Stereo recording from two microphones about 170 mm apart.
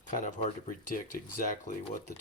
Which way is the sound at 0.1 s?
45° left (ahead or behind).